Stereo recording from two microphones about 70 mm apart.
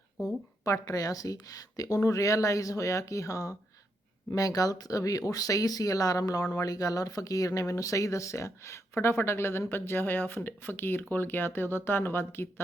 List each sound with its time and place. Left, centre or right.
0.6 s speech: left